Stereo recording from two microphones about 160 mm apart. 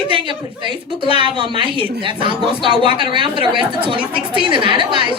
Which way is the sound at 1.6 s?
30° right (ahead or behind).